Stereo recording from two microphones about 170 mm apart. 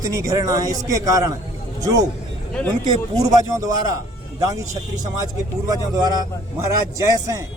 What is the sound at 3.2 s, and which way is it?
A man's voice, 20° right (ahead or behind).